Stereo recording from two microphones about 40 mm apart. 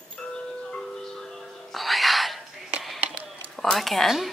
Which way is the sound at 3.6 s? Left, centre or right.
Centre.